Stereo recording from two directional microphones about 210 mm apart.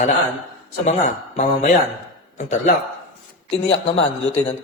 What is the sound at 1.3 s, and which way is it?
Speech, 35° left (ahead or behind).